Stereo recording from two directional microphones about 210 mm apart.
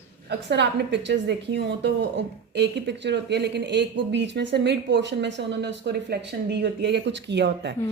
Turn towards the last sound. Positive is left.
turn(degrees=-55)  # may be behind; listen again after turning